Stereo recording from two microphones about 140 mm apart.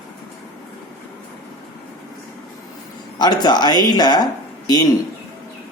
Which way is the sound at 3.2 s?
30° left (ahead or behind).